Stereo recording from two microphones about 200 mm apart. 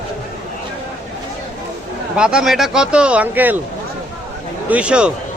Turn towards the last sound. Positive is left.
turn(degrees=-5)  # may be behind; listen again after turning